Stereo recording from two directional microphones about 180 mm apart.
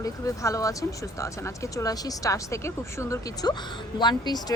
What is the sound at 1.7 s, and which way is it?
A woman's voice, 15° left (ahead or behind).